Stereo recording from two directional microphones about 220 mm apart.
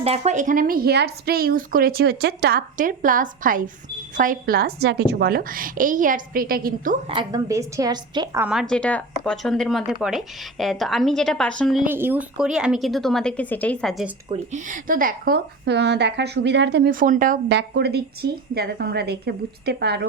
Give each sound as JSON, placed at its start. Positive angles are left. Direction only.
{"t": 0.0, "sound": "a woman's voice", "side_deg": -30}
{"t": 7.1, "sound": "a woman's voice", "side_deg": -20}
{"t": 8.4, "sound": "speech", "side_deg": 0}
{"t": 14.3, "sound": "a woman's voice", "side_deg": -30}